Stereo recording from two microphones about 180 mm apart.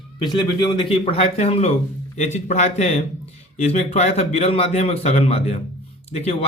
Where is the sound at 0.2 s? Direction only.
25° left (ahead or behind).